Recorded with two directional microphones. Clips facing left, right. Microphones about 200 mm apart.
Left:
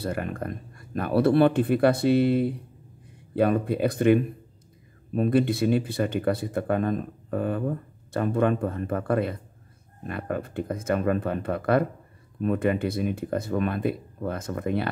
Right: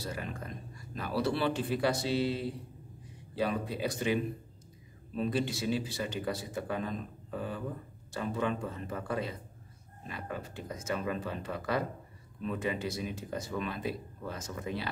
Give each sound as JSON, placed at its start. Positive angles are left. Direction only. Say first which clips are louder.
{"t": 0.0, "sound": "speech", "louder": "left 9 dB", "side_deg": 55}